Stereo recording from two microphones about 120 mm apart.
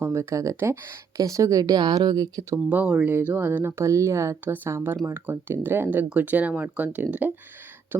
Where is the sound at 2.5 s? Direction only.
15° right (ahead or behind).